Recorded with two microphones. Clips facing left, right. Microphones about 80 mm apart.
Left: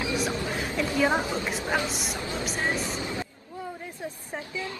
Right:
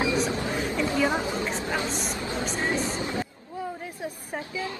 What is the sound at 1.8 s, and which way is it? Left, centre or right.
Speech, right.